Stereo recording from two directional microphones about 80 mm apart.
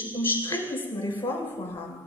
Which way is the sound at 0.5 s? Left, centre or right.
Left.